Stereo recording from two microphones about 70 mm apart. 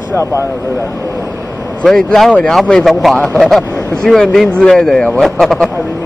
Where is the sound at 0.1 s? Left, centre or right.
Left.